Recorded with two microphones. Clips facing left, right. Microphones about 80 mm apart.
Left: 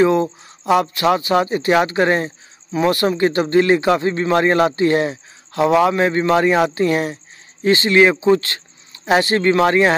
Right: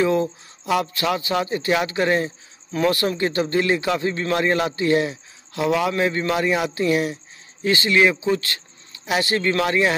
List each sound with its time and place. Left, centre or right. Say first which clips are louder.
0.0 s a man's voice: left 5 dB; left